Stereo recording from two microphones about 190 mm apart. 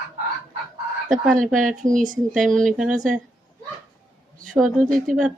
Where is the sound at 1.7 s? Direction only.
45° right (ahead or behind).